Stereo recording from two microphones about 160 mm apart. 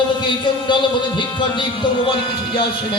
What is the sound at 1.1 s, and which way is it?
Music, 30° left (ahead or behind).